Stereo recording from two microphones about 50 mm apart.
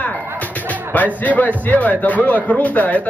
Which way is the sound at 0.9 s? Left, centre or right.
Left.